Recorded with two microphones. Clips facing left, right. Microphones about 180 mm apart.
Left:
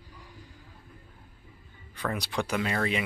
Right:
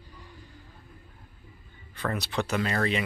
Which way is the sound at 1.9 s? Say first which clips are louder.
Right 1 dB; 10° left (ahead or behind).